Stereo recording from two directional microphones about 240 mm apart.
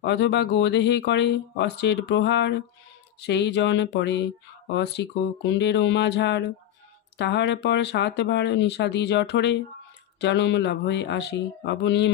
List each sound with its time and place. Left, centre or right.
0.0 s speech: left